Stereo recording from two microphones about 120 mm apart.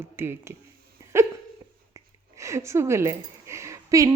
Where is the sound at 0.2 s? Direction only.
20° right (ahead or behind).